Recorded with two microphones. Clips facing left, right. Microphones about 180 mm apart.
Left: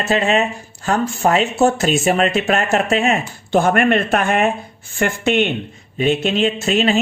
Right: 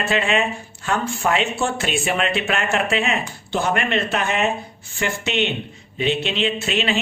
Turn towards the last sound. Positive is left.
turn(degrees=45)  # may be behind; listen again after turning